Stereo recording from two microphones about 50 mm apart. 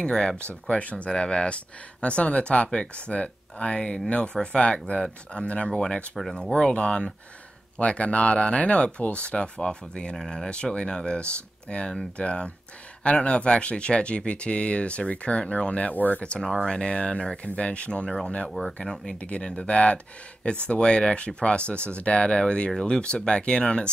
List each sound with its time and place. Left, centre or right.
0.0 s speech: centre
0.7 s speech: left
16.3 s speech: centre